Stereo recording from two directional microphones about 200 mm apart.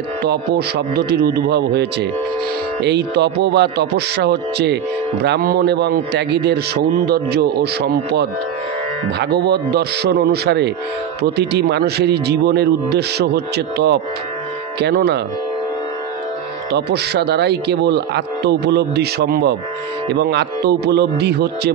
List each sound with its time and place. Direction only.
0.2 s a man's voice: 55° right (ahead or behind)
16.7 s a man's voice: 55° right (ahead or behind)